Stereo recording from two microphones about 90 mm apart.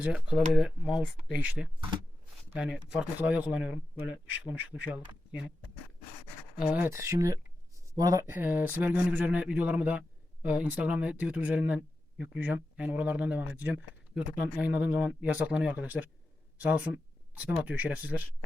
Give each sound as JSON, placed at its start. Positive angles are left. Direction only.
{"t": 0.0, "sound": "speech", "side_deg": -10}
{"t": 6.7, "sound": "speech", "side_deg": -25}
{"t": 8.3, "sound": "speech", "side_deg": -20}